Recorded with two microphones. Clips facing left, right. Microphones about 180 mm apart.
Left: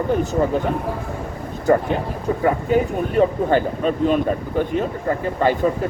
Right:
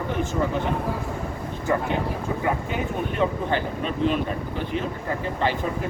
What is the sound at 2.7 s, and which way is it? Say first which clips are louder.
Speech: left 9 dB; 45° left (ahead or behind).